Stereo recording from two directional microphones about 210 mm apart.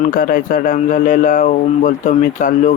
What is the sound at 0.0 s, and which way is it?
Speech, 40° left (ahead or behind).